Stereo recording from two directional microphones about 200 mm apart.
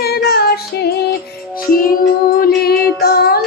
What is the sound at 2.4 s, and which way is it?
Music, 50° left (ahead or behind).